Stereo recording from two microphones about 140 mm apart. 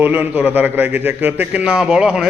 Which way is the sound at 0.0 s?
15° right (ahead or behind).